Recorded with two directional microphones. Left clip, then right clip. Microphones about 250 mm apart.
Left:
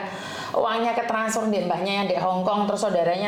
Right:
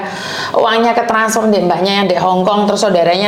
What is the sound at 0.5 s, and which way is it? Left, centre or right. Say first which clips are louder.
A woman's voice: right 11 dB; right.